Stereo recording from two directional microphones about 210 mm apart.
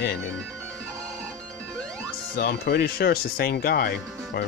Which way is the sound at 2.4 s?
50° left (ahead or behind).